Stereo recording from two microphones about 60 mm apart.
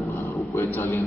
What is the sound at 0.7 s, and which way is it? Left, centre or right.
Speech, left.